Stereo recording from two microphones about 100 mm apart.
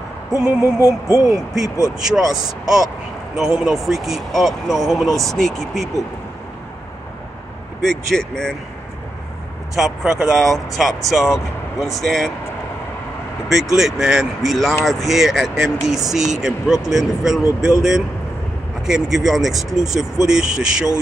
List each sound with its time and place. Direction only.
0.7 s speech: 30° left (ahead or behind)
1.3 s speech: 5° right (ahead or behind)
3.3 s speech: 5° right (ahead or behind)
7.8 s speech: 5° left (ahead or behind)
9.8 s speech: 5° right (ahead or behind)
13.5 s speech: 5° right (ahead or behind)
18.9 s speech: 5° right (ahead or behind)